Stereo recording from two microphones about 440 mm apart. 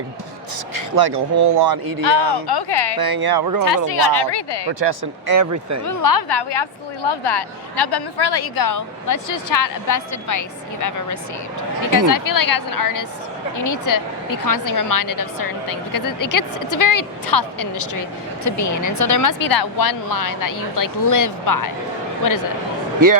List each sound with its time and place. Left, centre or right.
0.7 s speech: right
2.0 s a woman's voice: left
3.0 s speech: right
3.8 s a woman's voice: left
5.3 s speech: right
5.8 s a woman's voice: left
23.0 s speech: right